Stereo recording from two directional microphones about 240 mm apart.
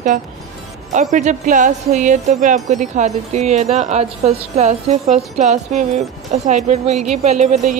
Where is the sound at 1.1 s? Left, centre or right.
Right.